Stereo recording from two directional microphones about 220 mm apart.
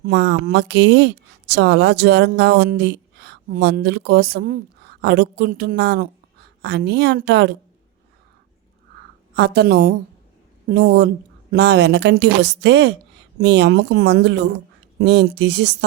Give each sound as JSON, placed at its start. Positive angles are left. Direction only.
{"t": 0.1, "sound": "speech", "side_deg": -50}
{"t": 9.3, "sound": "speech", "side_deg": -50}